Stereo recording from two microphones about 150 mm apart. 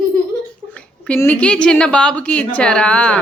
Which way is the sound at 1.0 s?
10° left (ahead or behind).